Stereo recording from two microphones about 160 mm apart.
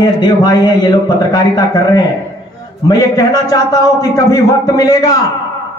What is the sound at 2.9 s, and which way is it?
A man's voice, 25° left (ahead or behind).